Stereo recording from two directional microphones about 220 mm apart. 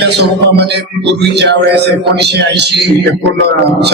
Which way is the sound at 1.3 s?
50° right (ahead or behind).